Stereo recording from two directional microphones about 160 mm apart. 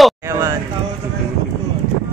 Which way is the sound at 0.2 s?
20° right (ahead or behind).